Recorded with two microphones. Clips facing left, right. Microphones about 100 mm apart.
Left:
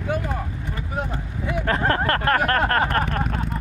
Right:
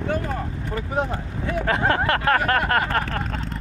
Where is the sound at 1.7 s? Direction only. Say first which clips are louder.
Even; 5° right (ahead or behind).